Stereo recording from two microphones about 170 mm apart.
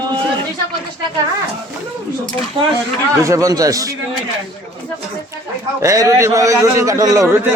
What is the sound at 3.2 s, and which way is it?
Speech, 20° right (ahead or behind).